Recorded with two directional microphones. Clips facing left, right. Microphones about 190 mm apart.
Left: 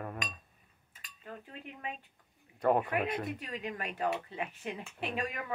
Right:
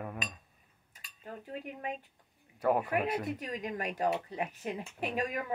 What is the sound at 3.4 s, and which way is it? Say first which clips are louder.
Speech: right 3 dB; 40° right (ahead or behind).